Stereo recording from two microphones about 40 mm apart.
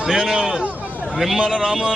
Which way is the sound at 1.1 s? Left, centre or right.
Centre.